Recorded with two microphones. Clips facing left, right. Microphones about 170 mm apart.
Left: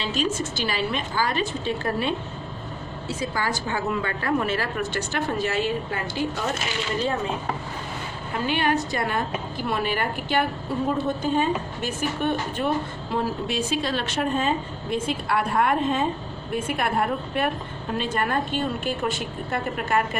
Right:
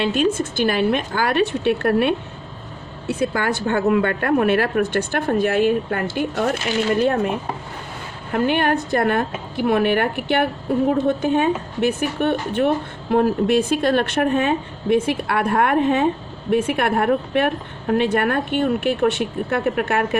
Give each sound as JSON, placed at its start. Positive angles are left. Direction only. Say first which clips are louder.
{"t": 0.0, "sound": "a woman's voice", "louder": "right 7 dB", "side_deg": -55}